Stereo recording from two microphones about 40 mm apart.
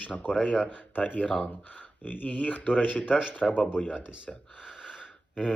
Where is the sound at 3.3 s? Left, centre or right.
Left.